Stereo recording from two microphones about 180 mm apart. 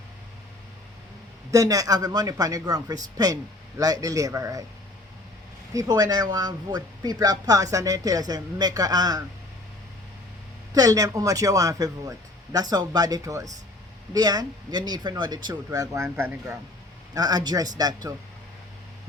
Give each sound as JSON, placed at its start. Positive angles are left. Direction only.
{"t": 1.5, "sound": "speech", "side_deg": -20}
{"t": 5.7, "sound": "speech", "side_deg": -20}
{"t": 10.8, "sound": "speech", "side_deg": -20}